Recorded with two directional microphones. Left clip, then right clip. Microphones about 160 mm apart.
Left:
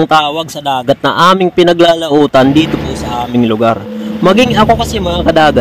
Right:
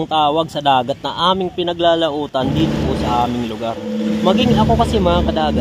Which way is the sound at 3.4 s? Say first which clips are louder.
Left 12 dB; 35° left (ahead or behind).